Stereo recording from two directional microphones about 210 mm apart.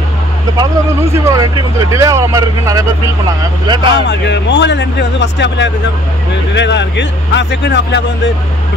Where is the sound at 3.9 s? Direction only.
55° left (ahead or behind).